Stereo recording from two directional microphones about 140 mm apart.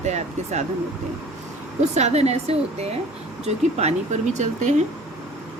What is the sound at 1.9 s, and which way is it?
Speech, 50° right (ahead or behind).